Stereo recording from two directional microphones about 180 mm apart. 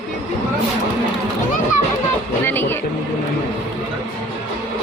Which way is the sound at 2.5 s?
10° left (ahead or behind).